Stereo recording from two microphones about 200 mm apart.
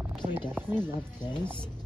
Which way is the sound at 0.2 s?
25° right (ahead or behind).